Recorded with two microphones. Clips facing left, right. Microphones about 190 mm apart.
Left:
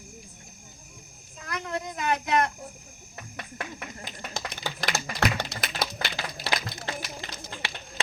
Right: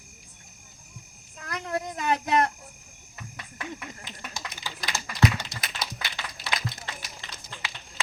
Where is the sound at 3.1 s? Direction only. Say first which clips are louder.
Left 4 dB; 50° left (ahead or behind).